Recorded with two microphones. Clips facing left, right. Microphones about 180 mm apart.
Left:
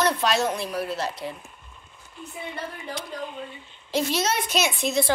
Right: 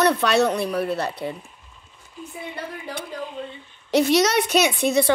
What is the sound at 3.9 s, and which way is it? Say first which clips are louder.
A woman's voice: right 7 dB; 70° right (ahead or behind).